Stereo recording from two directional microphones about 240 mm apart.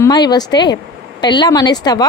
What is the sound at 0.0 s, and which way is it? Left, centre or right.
A woman's voice, centre.